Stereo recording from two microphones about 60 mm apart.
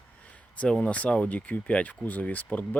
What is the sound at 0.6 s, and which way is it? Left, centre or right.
Speech, centre.